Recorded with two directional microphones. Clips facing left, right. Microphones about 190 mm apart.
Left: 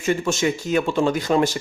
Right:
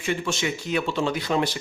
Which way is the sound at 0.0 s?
45° left (ahead or behind).